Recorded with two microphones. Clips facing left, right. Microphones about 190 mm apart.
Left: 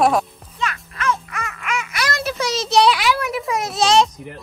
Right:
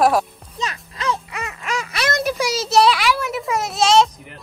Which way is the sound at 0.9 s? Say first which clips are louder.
Left 1 dB; 35° right (ahead or behind).